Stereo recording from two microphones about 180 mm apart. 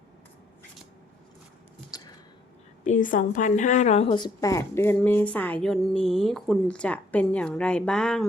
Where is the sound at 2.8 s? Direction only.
45° left (ahead or behind).